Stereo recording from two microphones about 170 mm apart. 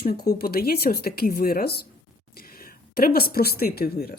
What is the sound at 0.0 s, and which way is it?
Speech, 65° left (ahead or behind).